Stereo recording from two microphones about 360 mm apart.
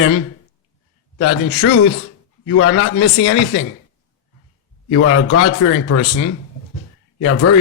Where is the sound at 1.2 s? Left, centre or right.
Left.